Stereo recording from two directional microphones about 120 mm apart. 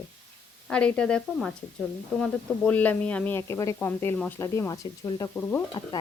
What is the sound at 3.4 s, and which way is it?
Speech, 25° left (ahead or behind).